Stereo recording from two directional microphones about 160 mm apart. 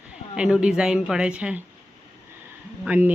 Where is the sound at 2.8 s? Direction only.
10° right (ahead or behind).